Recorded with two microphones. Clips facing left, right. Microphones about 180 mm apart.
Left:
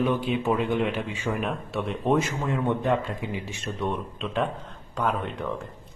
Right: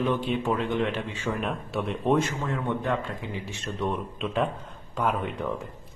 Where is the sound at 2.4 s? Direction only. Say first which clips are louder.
Left 3 dB; 15° left (ahead or behind).